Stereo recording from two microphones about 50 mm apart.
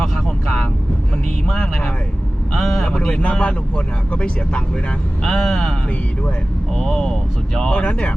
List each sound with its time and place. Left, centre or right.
0.0 s vehicle: centre
1.5 s a sound: centre
2.6 s vehicle: centre
2.8 s speech: left
5.2 s speech: centre
6.7 s speech: centre
7.7 s speech: left